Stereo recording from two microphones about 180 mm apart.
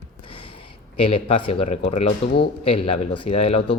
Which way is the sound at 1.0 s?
30° left (ahead or behind).